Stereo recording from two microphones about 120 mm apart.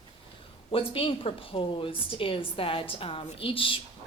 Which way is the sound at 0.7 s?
50° left (ahead or behind).